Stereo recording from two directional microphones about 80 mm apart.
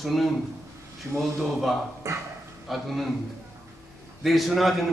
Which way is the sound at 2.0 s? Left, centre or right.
Right.